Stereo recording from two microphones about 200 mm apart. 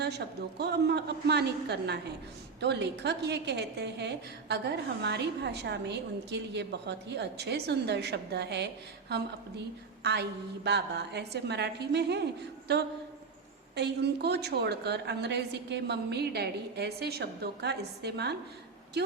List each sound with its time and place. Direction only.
0.6 s a woman's voice: 55° right (ahead or behind)